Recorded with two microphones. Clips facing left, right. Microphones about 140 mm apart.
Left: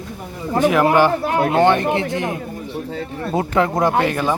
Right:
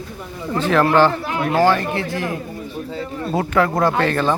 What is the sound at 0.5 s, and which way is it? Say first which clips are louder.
Speech: left 1 dB; 15° left (ahead or behind).